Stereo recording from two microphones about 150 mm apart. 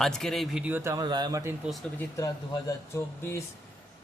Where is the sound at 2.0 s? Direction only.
20° left (ahead or behind).